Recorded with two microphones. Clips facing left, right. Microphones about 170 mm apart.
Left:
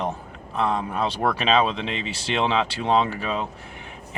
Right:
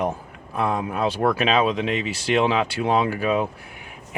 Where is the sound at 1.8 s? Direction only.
30° left (ahead or behind).